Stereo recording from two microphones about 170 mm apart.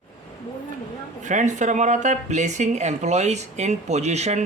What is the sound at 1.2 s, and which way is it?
Speech, 45° right (ahead or behind).